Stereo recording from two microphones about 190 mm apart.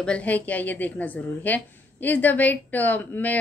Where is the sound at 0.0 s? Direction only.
5° left (ahead or behind).